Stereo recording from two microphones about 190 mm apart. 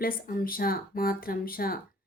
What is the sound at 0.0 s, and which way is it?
A woman's voice, 50° left (ahead or behind).